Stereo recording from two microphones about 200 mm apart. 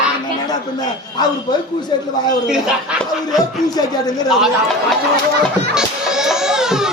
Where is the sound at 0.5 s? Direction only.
20° left (ahead or behind).